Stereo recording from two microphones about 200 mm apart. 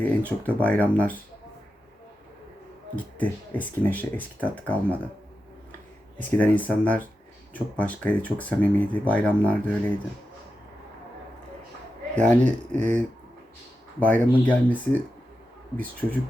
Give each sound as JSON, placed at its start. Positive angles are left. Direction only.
{"t": 0.0, "sound": "speech", "side_deg": 5}
{"t": 2.9, "sound": "speech", "side_deg": 10}
{"t": 6.1, "sound": "speech", "side_deg": 5}
{"t": 12.1, "sound": "speech", "side_deg": 5}
{"t": 12.7, "sound": "speech", "side_deg": -35}
{"t": 14.0, "sound": "speech", "side_deg": 10}
{"t": 15.8, "sound": "speech", "side_deg": 10}